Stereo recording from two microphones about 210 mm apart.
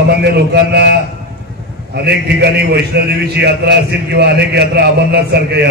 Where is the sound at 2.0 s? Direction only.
50° right (ahead or behind).